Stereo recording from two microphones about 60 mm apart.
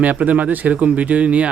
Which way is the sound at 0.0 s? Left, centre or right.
Right.